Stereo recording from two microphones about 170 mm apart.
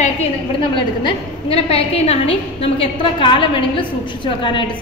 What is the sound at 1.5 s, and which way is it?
A woman's voice, 35° left (ahead or behind).